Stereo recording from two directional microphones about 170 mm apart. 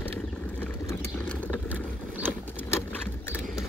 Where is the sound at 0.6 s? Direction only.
15° left (ahead or behind).